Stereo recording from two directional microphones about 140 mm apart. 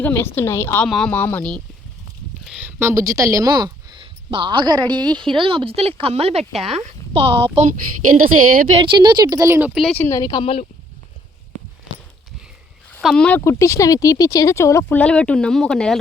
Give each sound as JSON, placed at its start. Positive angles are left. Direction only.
{"t": 0.0, "sound": "speech", "side_deg": 15}
{"t": 0.9, "sound": "speech", "side_deg": 5}
{"t": 2.4, "sound": "speech", "side_deg": -10}
{"t": 6.4, "sound": "speech", "side_deg": 0}
{"t": 6.7, "sound": "a woman's voice", "side_deg": -45}
{"t": 7.5, "sound": "speech", "side_deg": -55}
{"t": 7.8, "sound": "a woman's voice", "side_deg": -85}
{"t": 8.7, "sound": "speech", "side_deg": -35}
{"t": 9.7, "sound": "speech", "side_deg": 0}
{"t": 10.0, "sound": "speech", "side_deg": 20}
{"t": 13.0, "sound": "speech", "side_deg": 0}
{"t": 13.2, "sound": "speech", "side_deg": 15}
{"t": 14.9, "sound": "speech", "side_deg": 5}